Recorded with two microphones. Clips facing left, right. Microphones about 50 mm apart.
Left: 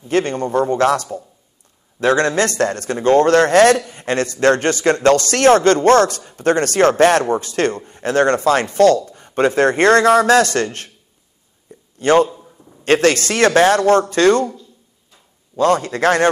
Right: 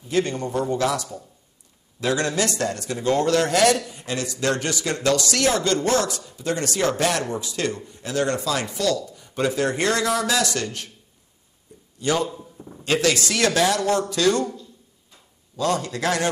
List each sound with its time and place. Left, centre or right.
0.1 s a man's voice: left
12.0 s a man's voice: left
15.5 s a man's voice: left